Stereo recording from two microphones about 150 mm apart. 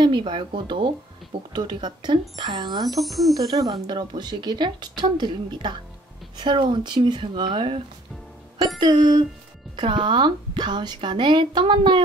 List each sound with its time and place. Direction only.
0.0 s speech: 30° right (ahead or behind)
3.0 s speech: centre (ahead or behind)
3.3 s speech: 25° right (ahead or behind)